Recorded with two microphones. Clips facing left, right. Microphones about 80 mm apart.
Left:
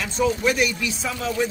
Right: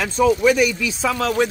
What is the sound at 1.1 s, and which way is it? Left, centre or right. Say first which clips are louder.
Speech: right 5 dB; right.